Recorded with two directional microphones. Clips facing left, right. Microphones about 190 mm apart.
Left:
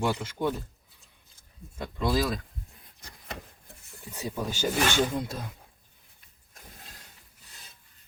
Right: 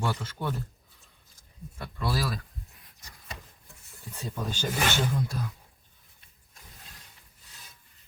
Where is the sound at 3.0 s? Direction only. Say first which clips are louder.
Left 4 dB; 60° left (ahead or behind).